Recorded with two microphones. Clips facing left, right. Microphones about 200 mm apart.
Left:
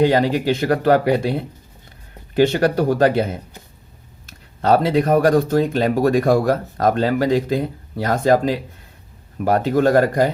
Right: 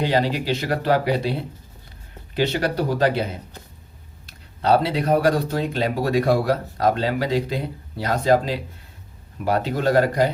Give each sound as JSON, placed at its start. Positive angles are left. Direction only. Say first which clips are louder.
{"t": 0.0, "sound": "speech", "louder": "left 6 dB", "side_deg": 50}
{"t": 2.3, "sound": "speech", "louder": "left 6 dB", "side_deg": 50}
{"t": 4.3, "sound": "speech", "louder": "left 2 dB", "side_deg": 50}